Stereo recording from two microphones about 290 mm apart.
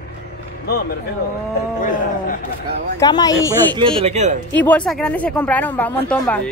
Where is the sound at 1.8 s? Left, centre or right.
Left.